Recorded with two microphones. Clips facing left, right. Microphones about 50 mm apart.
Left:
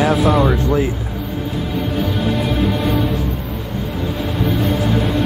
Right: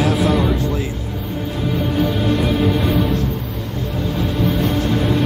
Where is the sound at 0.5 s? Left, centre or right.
Left.